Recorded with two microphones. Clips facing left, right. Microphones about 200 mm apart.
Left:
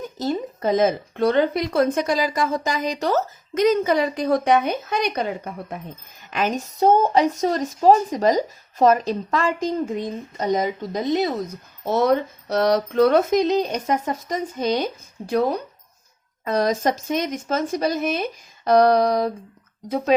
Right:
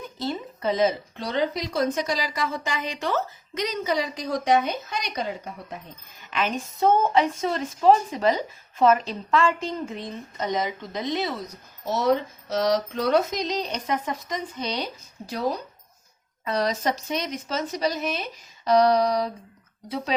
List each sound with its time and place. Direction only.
0.2 s a woman's voice: 45° left (ahead or behind)
6.3 s a woman's voice: 40° left (ahead or behind)